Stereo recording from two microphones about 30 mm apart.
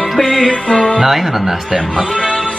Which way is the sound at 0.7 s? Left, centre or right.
Centre.